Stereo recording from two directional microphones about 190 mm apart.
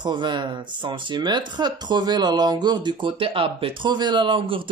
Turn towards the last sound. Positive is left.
turn(degrees=-25)  # may be behind; listen again after turning